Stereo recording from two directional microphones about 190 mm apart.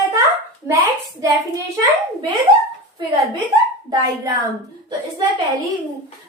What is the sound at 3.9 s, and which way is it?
Speech, 20° right (ahead or behind).